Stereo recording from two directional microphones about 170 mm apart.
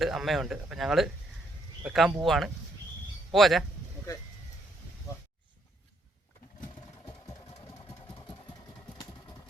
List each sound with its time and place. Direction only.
0.0 s speech: centre (ahead or behind)
8.0 s engine: 25° left (ahead or behind)